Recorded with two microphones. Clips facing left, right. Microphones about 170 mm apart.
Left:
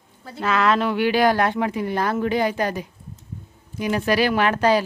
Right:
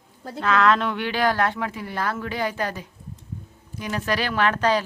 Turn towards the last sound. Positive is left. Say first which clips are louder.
# left 3 dB
turn(degrees=10)  # may be behind; listen again after turning